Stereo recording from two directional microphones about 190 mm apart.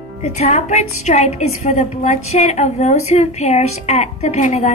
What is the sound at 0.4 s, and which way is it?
A woman's voice, 35° left (ahead or behind).